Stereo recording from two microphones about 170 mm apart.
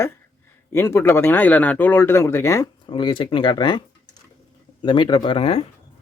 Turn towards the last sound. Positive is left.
turn(degrees=35)  # may be behind; listen again after turning